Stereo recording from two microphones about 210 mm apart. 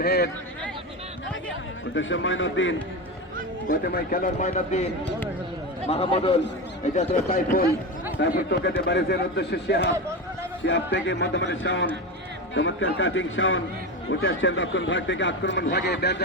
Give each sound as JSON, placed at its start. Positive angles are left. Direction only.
{"t": 0.0, "sound": "a man's voice", "side_deg": 50}
{"t": 2.0, "sound": "a man's voice", "side_deg": 65}
{"t": 3.7, "sound": "speech", "side_deg": 45}
{"t": 5.9, "sound": "a man's voice", "side_deg": 30}
{"t": 8.2, "sound": "a man's voice", "side_deg": 55}
{"t": 10.9, "sound": "a man's voice", "side_deg": 60}